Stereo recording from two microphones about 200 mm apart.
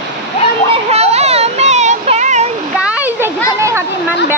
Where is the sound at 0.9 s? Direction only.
30° right (ahead or behind).